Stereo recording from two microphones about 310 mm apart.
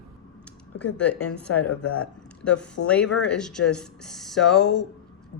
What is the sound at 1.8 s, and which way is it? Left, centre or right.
Speech, centre.